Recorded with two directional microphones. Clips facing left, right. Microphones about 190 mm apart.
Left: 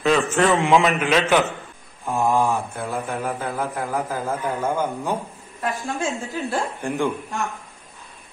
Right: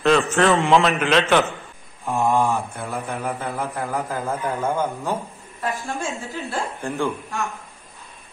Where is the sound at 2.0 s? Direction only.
Centre (ahead or behind).